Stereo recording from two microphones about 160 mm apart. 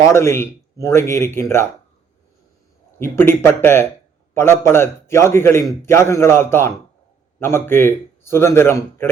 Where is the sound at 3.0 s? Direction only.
15° left (ahead or behind).